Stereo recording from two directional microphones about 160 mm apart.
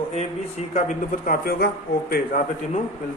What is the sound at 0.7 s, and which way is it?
A man's voice, 50° left (ahead or behind).